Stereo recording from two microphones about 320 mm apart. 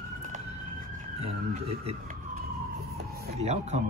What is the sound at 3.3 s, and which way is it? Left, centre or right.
Speech, right.